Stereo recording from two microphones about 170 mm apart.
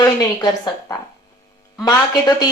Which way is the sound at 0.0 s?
20° left (ahead or behind).